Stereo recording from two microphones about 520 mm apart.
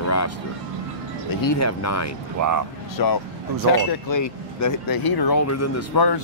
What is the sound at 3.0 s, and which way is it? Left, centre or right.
Speech, left.